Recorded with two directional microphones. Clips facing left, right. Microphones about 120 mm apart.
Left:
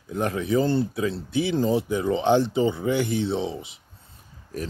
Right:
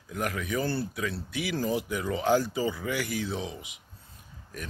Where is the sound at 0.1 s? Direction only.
30° left (ahead or behind).